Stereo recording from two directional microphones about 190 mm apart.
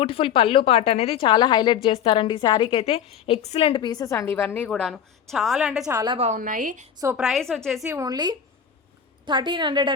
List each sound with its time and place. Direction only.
0.0 s a woman's voice: 30° left (ahead or behind); by 5.8 s centre (ahead or behind)
5.8 s a woman's voice: 20° right (ahead or behind)
6.1 s a woman's voice: 40° right (ahead or behind)
7.2 s a woman's voice: centre (ahead or behind)
7.9 s a woman's voice: 20° right (ahead or behind)